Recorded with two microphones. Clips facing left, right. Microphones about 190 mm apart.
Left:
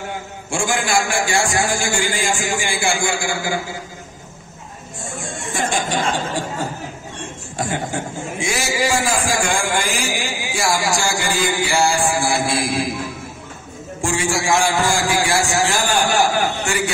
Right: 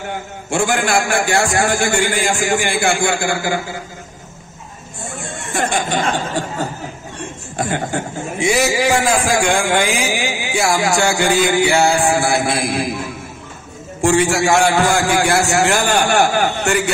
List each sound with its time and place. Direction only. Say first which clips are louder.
0.5 s a man's voice: right 4 dB; 60° right (ahead or behind)
5.5 s snicker: right 3 dB; 60° right (ahead or behind)
7.5 s a man's voice: right 3 dB; 65° right (ahead or behind)
14.0 s a man's voice: right 6 dB; 65° right (ahead or behind)